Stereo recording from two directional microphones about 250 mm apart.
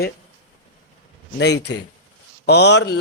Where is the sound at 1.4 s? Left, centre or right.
Left.